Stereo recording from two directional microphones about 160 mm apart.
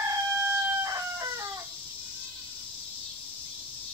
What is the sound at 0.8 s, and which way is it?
Chicken, 20° right (ahead or behind).